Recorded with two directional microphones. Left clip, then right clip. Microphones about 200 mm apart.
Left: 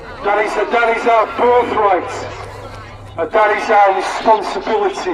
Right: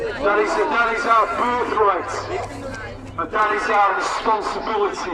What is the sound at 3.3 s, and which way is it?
A man's voice, 35° left (ahead or behind).